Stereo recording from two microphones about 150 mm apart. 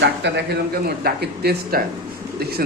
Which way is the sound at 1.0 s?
90° right.